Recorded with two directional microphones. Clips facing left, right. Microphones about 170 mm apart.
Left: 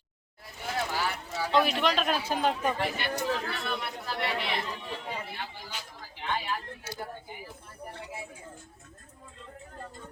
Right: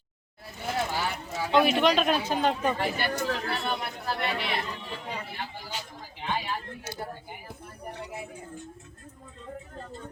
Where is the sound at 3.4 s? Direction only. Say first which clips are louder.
Right 3 dB; 35° right (ahead or behind).